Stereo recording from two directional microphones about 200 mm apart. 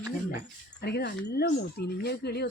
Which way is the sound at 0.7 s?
55° left (ahead or behind).